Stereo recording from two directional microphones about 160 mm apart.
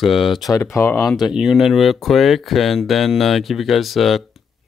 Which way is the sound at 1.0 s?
Centre (ahead or behind).